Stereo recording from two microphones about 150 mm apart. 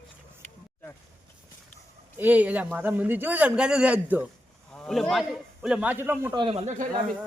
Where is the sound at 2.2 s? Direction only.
10° right (ahead or behind).